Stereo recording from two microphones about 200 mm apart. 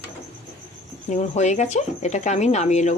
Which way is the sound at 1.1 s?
35° left (ahead or behind).